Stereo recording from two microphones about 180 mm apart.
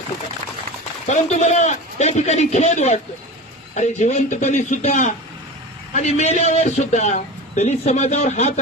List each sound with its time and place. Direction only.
1.0 s a man's voice: 40° left (ahead or behind)